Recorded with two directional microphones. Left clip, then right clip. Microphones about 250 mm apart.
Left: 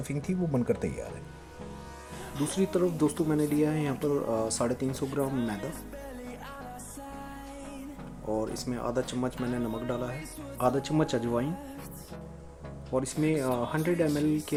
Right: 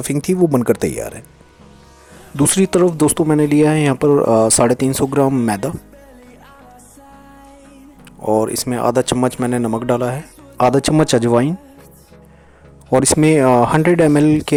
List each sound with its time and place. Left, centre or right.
0.0 s speech: right
2.5 s speech: right
8.2 s speech: right
12.9 s speech: right